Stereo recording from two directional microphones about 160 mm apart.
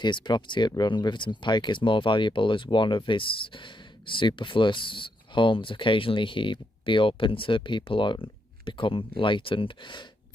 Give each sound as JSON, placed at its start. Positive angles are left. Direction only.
{"t": 0.0, "sound": "speech", "side_deg": 30}